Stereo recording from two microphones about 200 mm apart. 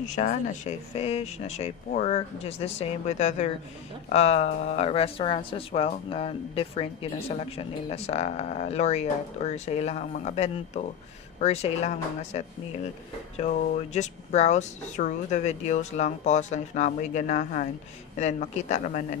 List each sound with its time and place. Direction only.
0.0 s speech: 40° left (ahead or behind)